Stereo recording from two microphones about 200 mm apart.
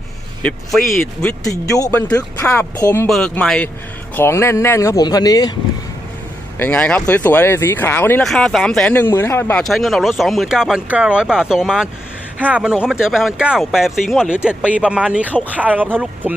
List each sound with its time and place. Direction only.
0.4 s speech: centre (ahead or behind)
1.5 s speech: 15° left (ahead or behind)
3.1 s speech: 5° left (ahead or behind)
6.6 s speech: 10° left (ahead or behind)
15.3 s speech: 5° left (ahead or behind)
15.6 s speech: 10° right (ahead or behind)